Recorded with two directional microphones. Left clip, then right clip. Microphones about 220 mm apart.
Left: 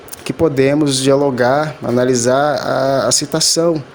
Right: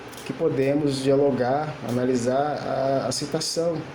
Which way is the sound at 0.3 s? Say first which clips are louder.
Left 9 dB; 50° left (ahead or behind).